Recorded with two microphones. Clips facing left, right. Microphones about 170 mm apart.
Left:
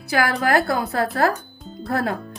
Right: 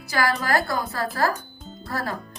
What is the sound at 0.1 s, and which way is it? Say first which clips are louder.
Speech: left 4 dB; 60° left (ahead or behind).